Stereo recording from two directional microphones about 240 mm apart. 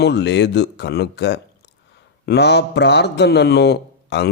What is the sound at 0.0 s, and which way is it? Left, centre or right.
Speech, left.